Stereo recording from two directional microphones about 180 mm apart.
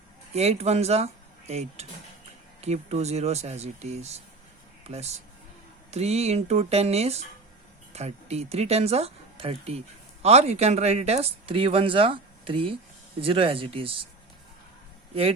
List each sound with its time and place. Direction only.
0.3 s speech: 35° right (ahead or behind)